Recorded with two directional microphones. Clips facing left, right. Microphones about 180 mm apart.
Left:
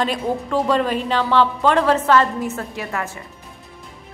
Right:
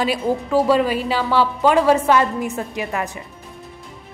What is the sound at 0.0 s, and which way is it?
A woman's voice, 5° right (ahead or behind).